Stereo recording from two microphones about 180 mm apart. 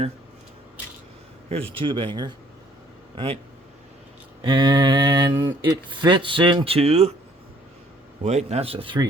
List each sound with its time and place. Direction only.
1.5 s speech: 30° right (ahead or behind)
4.4 s speech: 25° right (ahead or behind)
8.2 s speech: 40° right (ahead or behind)